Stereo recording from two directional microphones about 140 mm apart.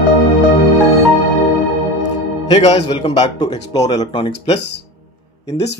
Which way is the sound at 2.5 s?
45° left (ahead or behind).